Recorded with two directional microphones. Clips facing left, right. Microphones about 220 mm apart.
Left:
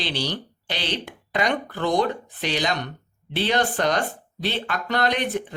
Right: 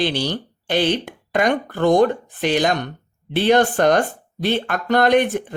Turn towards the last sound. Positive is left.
turn(degrees=-50)  # may be behind; listen again after turning